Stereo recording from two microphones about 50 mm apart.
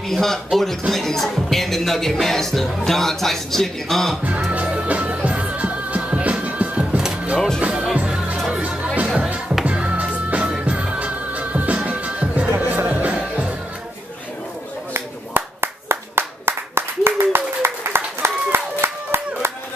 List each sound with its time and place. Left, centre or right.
0.0 s speech: centre
4.5 s music: right
15.0 s clapping: right
17.9 s a sound: right